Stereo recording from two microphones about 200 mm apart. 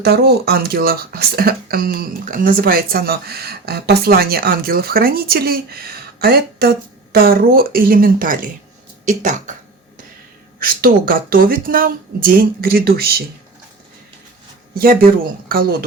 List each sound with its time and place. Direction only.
0.0 s speech: 55° right (ahead or behind); by 9.6 s 40° right (ahead or behind)
10.6 s speech: 45° right (ahead or behind)
14.8 s speech: 45° right (ahead or behind)